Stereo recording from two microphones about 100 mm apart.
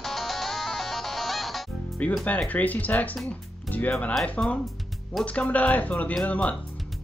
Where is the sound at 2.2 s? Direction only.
15° left (ahead or behind).